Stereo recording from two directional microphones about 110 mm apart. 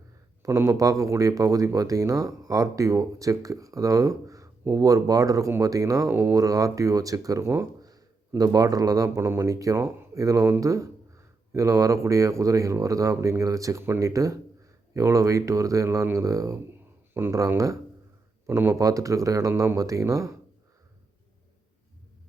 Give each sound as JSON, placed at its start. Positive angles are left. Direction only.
{"t": 0.4, "sound": "speech", "side_deg": -25}
{"t": 9.0, "sound": "speech", "side_deg": -25}
{"t": 18.8, "sound": "speech", "side_deg": -30}